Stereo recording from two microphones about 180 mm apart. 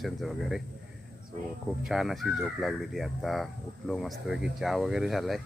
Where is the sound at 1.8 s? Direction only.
Centre (ahead or behind).